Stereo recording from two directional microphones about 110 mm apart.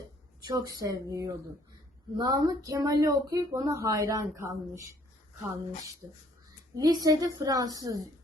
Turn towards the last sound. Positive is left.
turn(degrees=-35)  # may be behind; listen again after turning